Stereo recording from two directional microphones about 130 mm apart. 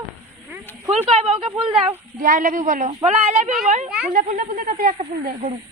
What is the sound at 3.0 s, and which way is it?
Speech, 60° right (ahead or behind).